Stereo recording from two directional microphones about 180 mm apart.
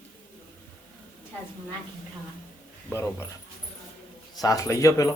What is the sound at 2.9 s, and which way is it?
Speech, 15° left (ahead or behind).